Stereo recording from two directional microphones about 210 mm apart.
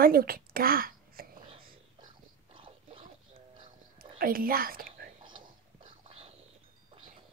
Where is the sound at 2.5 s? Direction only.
25° right (ahead or behind).